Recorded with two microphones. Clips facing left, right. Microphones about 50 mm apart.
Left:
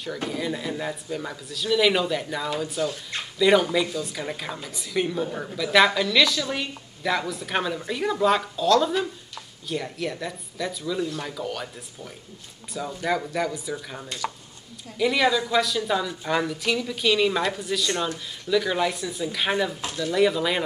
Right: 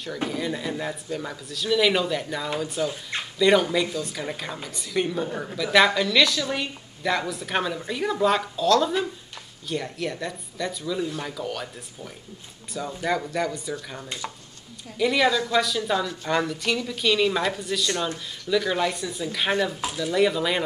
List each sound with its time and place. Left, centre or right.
0.3 s a woman's voice: centre
2.8 s speech: centre
3.3 s a woman's voice: centre
14.0 s speech: right
15.0 s a woman's voice: centre